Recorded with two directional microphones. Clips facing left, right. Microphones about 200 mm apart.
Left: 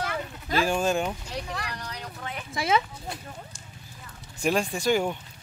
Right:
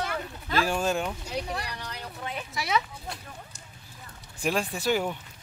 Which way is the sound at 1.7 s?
5° right (ahead or behind).